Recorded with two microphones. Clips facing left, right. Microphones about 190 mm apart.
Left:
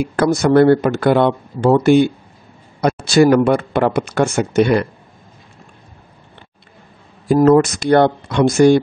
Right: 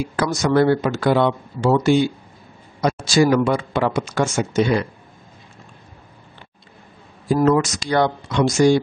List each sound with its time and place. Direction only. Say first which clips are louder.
0.0 s a man's voice: left 6 dB; 55° left (ahead or behind)
7.3 s a man's voice: left 6 dB; 45° left (ahead or behind)